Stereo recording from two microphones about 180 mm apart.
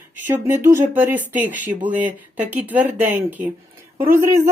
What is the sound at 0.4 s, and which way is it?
A woman's voice, 15° right (ahead or behind).